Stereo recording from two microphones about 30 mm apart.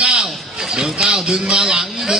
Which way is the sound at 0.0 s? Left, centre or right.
Right.